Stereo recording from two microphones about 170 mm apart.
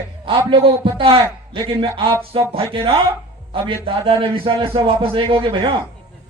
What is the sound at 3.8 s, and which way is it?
A man's voice, 30° right (ahead or behind).